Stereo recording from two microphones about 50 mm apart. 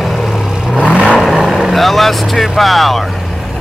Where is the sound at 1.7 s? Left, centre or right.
Centre.